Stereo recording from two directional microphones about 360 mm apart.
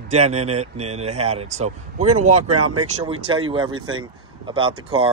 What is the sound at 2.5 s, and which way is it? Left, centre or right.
Speech, right.